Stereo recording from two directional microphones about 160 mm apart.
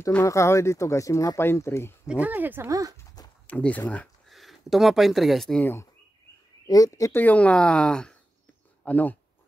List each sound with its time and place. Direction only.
0.1 s speech: 20° left (ahead or behind)
2.0 s speech: 10° right (ahead or behind)
3.4 s speech: 10° left (ahead or behind)